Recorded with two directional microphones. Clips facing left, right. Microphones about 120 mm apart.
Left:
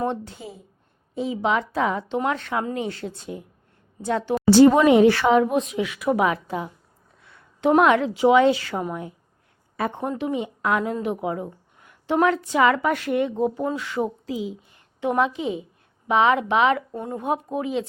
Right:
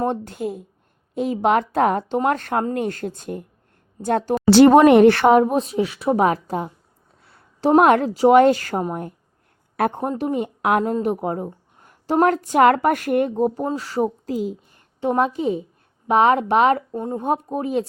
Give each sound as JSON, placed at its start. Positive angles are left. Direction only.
{"t": 0.0, "sound": "a woman's voice", "side_deg": -45}
{"t": 2.0, "sound": "speech", "side_deg": -45}
{"t": 4.4, "sound": "a woman's voice", "side_deg": -70}
{"t": 5.4, "sound": "a woman's voice", "side_deg": -35}
{"t": 7.2, "sound": "a sound", "side_deg": -35}
{"t": 7.9, "sound": "speech", "side_deg": -45}
{"t": 11.0, "sound": "speech", "side_deg": -45}
{"t": 15.0, "sound": "a woman's voice", "side_deg": -40}
{"t": 16.9, "sound": "a woman's voice", "side_deg": -30}